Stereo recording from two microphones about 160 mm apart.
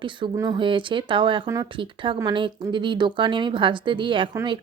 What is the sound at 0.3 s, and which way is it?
A woman's voice, 30° right (ahead or behind).